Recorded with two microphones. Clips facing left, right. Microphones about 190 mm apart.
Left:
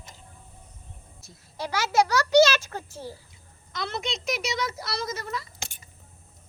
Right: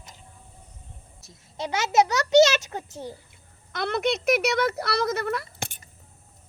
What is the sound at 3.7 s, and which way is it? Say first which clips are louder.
A child's voice: right 7 dB; 55° right (ahead or behind).